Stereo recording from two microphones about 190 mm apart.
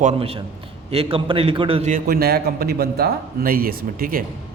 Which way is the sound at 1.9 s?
55° right (ahead or behind).